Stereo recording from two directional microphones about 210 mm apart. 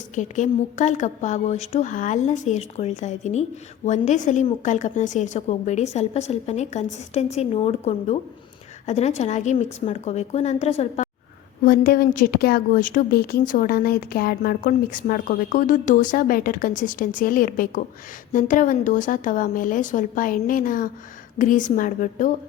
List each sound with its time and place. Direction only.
0.2 s a woman's voice: 35° left (ahead or behind)
11.6 s a woman's voice: 45° left (ahead or behind)